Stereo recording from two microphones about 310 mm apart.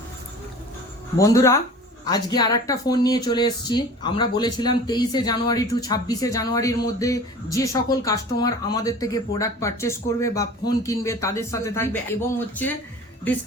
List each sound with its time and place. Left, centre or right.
1.2 s speech: centre